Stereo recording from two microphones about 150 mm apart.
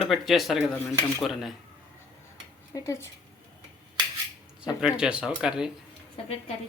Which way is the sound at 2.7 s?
20° left (ahead or behind).